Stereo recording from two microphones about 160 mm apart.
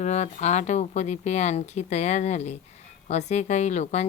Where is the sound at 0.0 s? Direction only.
50° left (ahead or behind).